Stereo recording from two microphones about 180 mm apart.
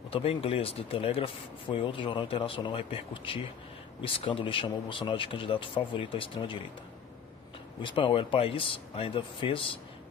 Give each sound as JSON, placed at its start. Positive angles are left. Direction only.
{"t": 0.1, "sound": "speech", "side_deg": 30}
{"t": 7.8, "sound": "speech", "side_deg": 25}